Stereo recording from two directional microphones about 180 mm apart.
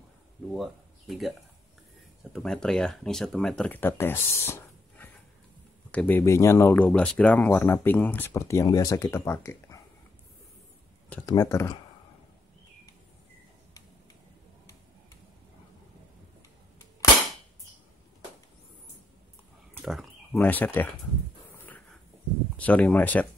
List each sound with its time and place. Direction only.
0.5 s speech: centre (ahead or behind)
2.3 s speech: 5° left (ahead or behind)
11.2 s speech: 20° left (ahead or behind)
19.7 s wild animals: centre (ahead or behind)
20.3 s speech: 10° left (ahead or behind)
22.6 s speech: 10° left (ahead or behind)